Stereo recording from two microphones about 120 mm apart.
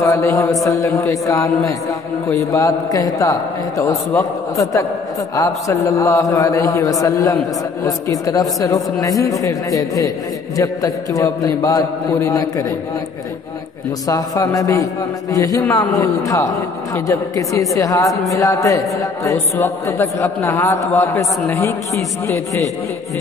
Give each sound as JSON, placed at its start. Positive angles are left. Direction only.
{"t": 0.0, "sound": "a man's voice", "side_deg": 25}
{"t": 14.0, "sound": "a man's voice", "side_deg": 30}